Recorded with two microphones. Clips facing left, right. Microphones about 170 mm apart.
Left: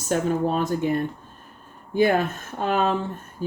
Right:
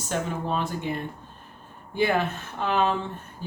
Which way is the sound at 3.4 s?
50° left (ahead or behind).